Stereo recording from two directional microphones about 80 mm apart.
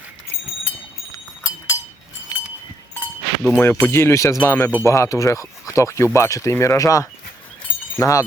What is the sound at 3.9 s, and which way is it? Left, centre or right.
Speech, left.